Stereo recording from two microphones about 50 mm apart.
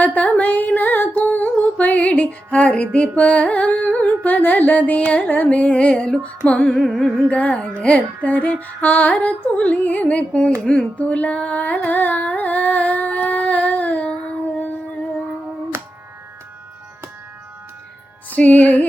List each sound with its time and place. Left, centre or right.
0.0 s music: left
6.7 s music: centre
7.3 s music: left
11.9 s humming: left
18.3 s music: left